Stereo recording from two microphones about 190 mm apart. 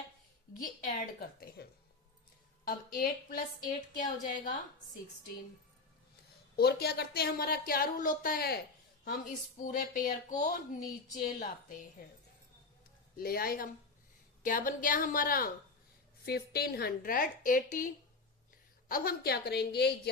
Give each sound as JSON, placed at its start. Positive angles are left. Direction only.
{"t": 0.5, "sound": "a woman's voice", "side_deg": 50}
{"t": 2.6, "sound": "a woman's voice", "side_deg": 45}
{"t": 6.6, "sound": "a woman's voice", "side_deg": 55}
{"t": 9.6, "sound": "a woman's voice", "side_deg": 45}
{"t": 13.1, "sound": "a woman's voice", "side_deg": 50}